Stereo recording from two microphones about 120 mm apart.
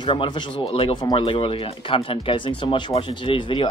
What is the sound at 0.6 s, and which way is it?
Speech, 50° left (ahead or behind).